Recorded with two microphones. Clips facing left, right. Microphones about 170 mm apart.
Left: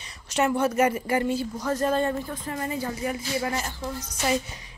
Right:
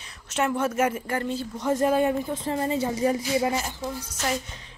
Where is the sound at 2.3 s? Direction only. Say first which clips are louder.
Right 5 dB; 30° right (ahead or behind).